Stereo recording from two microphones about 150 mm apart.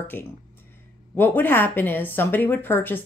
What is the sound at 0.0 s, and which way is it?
Speech, 15° left (ahead or behind).